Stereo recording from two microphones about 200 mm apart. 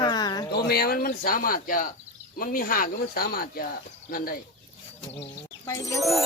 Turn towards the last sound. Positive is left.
turn(degrees=15)  # may be behind; listen again after turning